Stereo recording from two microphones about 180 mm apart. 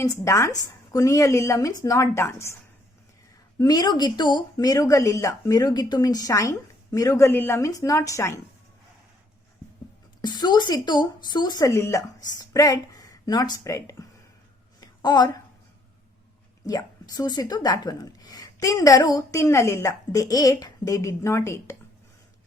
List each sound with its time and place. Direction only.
0.0 s speech: 15° left (ahead or behind)
3.6 s speech: 20° left (ahead or behind)
10.2 s speech: 25° left (ahead or behind)
14.8 s a sound: 20° left (ahead or behind)
16.6 s speech: 20° left (ahead or behind)